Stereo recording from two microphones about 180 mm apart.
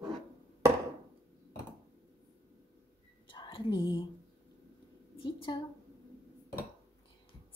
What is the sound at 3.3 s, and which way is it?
Whispering, 30° left (ahead or behind).